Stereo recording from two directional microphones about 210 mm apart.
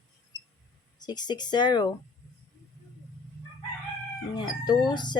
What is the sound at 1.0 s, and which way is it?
Speech, 20° left (ahead or behind).